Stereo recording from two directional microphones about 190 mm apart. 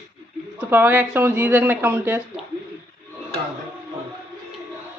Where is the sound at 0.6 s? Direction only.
10° right (ahead or behind).